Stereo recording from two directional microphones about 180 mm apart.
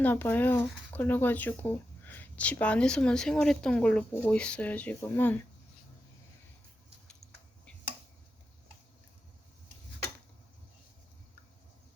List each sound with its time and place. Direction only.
0.0 s speech: 10° left (ahead or behind)